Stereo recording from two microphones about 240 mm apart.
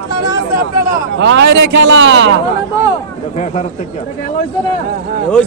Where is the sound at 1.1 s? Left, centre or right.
Right.